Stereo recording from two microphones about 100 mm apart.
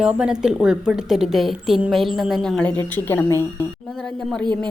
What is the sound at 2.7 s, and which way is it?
Speech, 20° left (ahead or behind).